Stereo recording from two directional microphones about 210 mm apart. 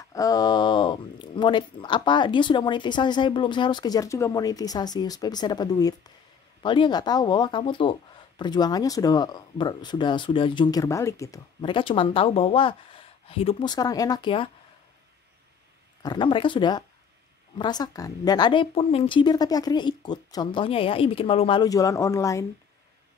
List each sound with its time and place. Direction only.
0.0 s speech: 15° left (ahead or behind)
16.0 s speech: 20° left (ahead or behind)